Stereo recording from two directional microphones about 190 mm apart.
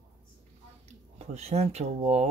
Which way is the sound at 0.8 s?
35° right (ahead or behind).